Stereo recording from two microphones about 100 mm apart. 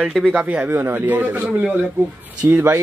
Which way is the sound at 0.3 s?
15° right (ahead or behind).